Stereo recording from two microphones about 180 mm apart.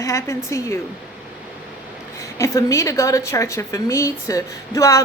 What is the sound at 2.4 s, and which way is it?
A woman's voice, 15° left (ahead or behind).